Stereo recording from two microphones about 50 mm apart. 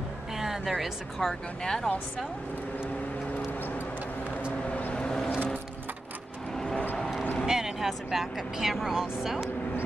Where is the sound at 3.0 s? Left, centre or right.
Left.